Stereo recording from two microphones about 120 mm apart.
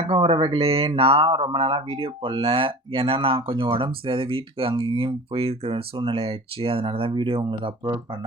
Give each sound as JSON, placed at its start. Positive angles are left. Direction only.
{"t": 0.1, "sound": "speech", "side_deg": -50}